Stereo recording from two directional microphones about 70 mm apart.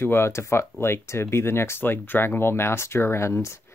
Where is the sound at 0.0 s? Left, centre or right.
Left.